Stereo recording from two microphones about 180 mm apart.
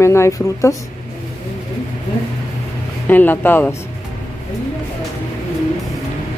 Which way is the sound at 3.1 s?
10° left (ahead or behind).